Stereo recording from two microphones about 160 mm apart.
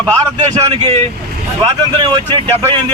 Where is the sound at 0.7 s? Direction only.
30° right (ahead or behind).